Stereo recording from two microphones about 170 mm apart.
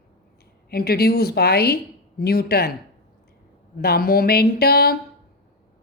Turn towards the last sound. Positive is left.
turn(degrees=65)  # may be behind; listen again after turning